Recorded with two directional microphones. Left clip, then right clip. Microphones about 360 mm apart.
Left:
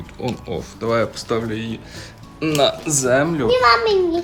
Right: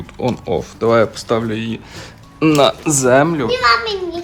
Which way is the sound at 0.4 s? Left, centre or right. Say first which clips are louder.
Right 9 dB; centre.